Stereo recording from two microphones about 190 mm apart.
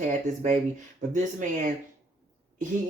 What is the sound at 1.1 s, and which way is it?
Speech, 40° right (ahead or behind).